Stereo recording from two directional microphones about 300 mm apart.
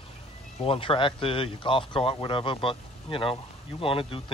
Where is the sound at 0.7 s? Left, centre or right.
Centre.